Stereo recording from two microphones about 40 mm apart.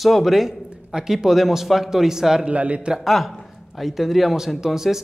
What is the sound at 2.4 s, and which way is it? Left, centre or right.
Speech, right.